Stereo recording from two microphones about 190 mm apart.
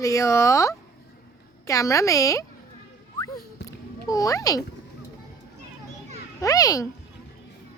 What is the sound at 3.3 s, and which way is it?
Music, 50° left (ahead or behind).